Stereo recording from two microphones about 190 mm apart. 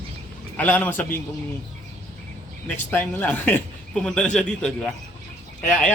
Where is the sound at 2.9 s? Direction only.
10° left (ahead or behind).